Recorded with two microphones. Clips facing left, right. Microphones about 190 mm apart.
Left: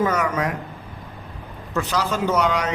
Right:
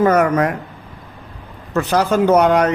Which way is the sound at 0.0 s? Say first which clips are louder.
Right 8 dB; 55° right (ahead or behind).